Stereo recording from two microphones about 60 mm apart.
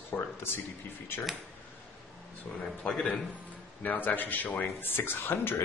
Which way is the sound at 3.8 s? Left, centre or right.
Left.